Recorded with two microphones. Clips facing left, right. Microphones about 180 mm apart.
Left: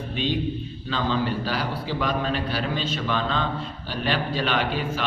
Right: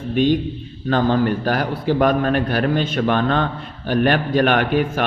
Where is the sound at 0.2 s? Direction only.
50° right (ahead or behind).